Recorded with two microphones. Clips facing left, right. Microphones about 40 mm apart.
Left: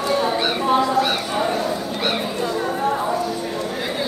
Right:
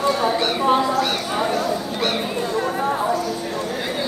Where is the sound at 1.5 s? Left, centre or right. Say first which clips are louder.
Even; centre.